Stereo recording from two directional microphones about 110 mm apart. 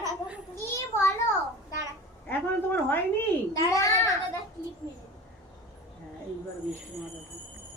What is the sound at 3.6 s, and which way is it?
Speech, 30° left (ahead or behind).